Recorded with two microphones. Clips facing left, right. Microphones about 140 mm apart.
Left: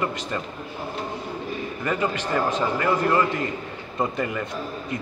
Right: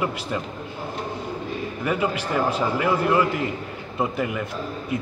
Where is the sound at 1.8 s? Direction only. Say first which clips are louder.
Right 1 dB; 10° right (ahead or behind).